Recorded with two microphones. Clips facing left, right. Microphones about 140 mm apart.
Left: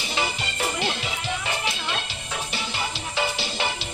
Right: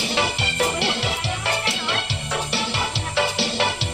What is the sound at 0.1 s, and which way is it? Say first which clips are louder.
Music: right 1 dB; 75° right (ahead or behind).